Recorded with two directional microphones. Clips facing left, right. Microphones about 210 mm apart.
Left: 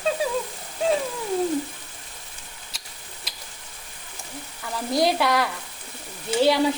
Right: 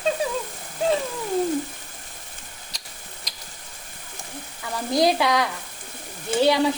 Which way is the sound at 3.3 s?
5° left (ahead or behind).